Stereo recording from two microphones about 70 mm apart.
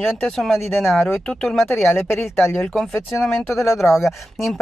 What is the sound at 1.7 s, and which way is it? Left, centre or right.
Speech, left.